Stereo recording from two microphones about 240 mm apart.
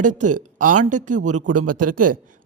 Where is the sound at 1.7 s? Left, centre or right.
Right.